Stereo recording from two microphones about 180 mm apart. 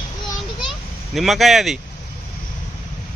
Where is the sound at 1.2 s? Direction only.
Centre (ahead or behind).